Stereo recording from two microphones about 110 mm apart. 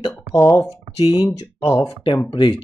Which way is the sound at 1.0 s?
40° left (ahead or behind).